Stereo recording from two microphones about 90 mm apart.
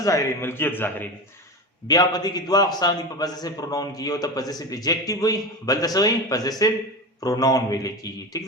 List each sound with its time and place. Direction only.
0.0 s a man's voice: 35° left (ahead or behind)
1.9 s a man's voice: 45° left (ahead or behind)